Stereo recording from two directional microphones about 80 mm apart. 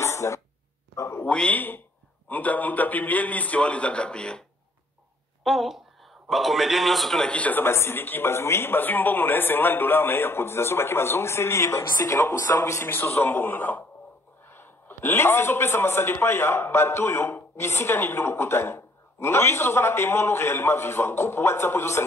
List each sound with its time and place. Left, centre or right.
0.0 s dog: left
0.9 s a man's voice: left
1.2 s a man's voice: centre
5.4 s a man's voice: centre
7.6 s a man's voice: left